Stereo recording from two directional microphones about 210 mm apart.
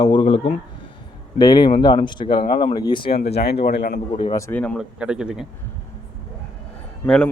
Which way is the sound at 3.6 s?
50° left (ahead or behind).